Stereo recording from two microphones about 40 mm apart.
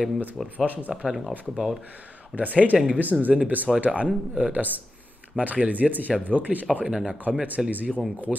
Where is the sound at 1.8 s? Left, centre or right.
Right.